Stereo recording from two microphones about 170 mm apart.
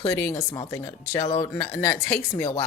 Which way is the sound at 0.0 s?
15° left (ahead or behind).